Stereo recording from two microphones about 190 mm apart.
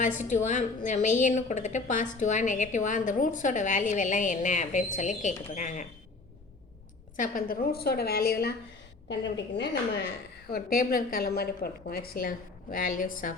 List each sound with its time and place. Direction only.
0.2 s a woman's voice: 40° left (ahead or behind)
7.2 s a woman's voice: 50° left (ahead or behind)
9.0 s a woman's voice: 65° left (ahead or behind)
10.5 s a woman's voice: 50° left (ahead or behind)